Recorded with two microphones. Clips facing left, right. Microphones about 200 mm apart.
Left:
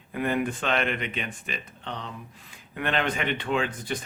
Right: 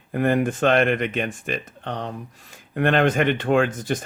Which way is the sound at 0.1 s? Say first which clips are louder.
Right 6 dB; 50° right (ahead or behind).